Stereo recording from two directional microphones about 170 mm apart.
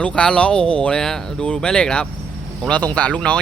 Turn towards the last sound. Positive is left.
turn(degrees=5)  # may be behind; listen again after turning